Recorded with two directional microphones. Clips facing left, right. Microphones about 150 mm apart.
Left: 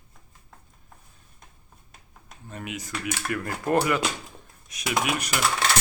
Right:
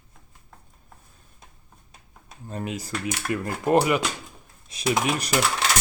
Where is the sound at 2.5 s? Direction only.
35° right (ahead or behind).